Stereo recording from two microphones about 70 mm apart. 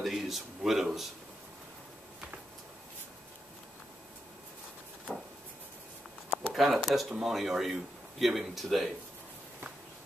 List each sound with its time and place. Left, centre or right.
0.0 s speech: centre
5.1 s a sound: centre
6.5 s speech: centre